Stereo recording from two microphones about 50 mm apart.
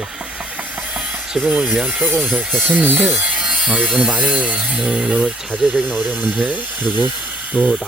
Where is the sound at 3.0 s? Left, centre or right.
Centre.